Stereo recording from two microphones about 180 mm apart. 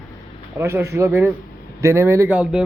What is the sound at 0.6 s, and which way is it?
A man's voice, 15° right (ahead or behind).